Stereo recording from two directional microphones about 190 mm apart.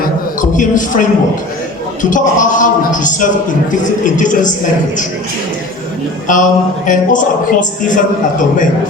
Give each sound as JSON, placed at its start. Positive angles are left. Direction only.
{"t": 0.5, "sound": "a man's voice", "side_deg": 45}
{"t": 6.2, "sound": "a man's voice", "side_deg": 45}